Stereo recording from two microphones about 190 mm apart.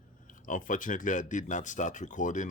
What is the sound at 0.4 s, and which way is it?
Speech, 45° left (ahead or behind).